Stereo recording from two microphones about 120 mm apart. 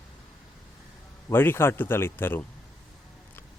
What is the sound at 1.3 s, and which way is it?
Speech, 20° left (ahead or behind).